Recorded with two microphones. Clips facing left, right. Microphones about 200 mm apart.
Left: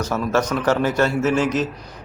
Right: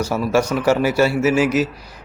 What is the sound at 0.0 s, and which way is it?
A man's voice, 10° right (ahead or behind).